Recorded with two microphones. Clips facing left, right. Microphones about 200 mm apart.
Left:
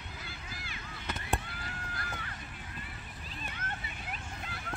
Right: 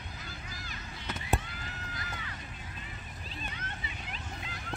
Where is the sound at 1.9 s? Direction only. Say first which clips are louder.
Even; 50° left (ahead or behind).